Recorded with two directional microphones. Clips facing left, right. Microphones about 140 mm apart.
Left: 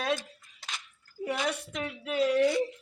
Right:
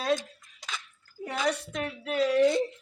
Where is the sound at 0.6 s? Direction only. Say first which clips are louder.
Right 3 dB; 15° right (ahead or behind).